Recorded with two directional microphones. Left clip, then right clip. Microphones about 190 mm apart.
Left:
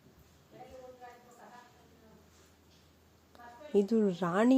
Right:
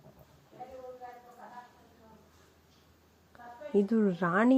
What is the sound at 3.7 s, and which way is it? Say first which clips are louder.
Speech: even; 10° right (ahead or behind).